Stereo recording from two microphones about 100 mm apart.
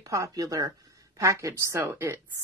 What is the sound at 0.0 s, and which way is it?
Speech, 35° right (ahead or behind).